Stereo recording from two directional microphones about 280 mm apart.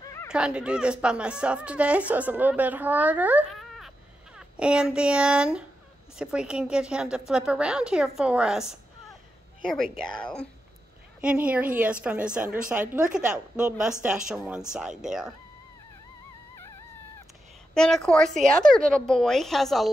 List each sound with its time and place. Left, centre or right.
0.3 s speech: centre
17.7 s speech: centre